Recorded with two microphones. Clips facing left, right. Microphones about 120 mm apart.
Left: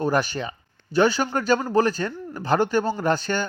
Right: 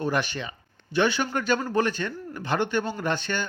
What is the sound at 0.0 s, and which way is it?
Speech, 40° left (ahead or behind).